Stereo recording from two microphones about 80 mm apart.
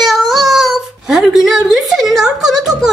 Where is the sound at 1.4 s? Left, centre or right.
Centre.